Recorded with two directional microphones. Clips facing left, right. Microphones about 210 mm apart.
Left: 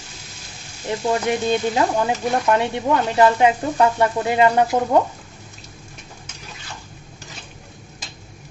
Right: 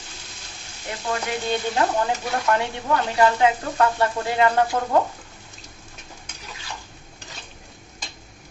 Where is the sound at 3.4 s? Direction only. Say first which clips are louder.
Left 3 dB; 20° left (ahead or behind).